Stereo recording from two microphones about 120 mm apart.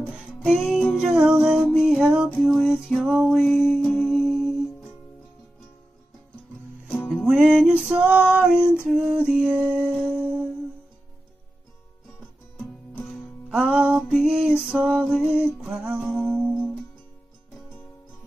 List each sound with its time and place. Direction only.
0.2 s music: 5° right (ahead or behind)
3.8 s music: 20° left (ahead or behind)
4.1 s music: centre (ahead or behind)
7.1 s music: 5° right (ahead or behind)
13.1 s music: 5° right (ahead or behind)